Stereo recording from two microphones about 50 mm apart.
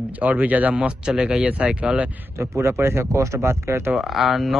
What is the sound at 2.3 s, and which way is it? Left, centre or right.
Speech, right.